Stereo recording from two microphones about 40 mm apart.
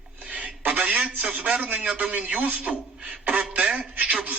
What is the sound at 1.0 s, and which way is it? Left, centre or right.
Speech, right.